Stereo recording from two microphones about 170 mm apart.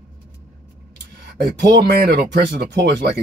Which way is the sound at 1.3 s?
85° right.